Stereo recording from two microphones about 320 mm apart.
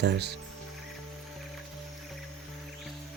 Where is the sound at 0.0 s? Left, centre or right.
Right.